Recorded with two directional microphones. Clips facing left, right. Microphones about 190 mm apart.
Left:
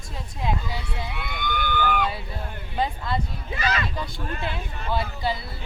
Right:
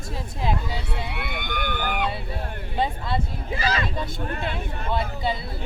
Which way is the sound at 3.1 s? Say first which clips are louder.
Right 1 dB; 30° right (ahead or behind).